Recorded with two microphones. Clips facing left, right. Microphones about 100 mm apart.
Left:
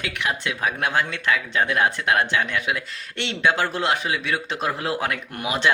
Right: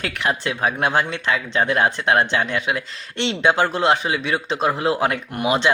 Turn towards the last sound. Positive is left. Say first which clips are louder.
# right 4 dB
turn(degrees=-25)  # may be behind; listen again after turning